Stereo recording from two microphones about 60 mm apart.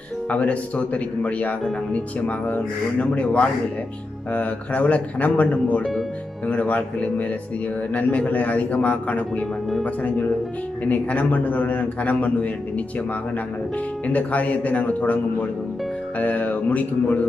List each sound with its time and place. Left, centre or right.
0.3 s speech: left
14.0 s speech: left
16.2 s speech: left